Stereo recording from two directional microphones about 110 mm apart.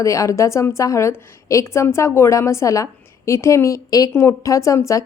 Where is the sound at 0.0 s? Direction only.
30° left (ahead or behind).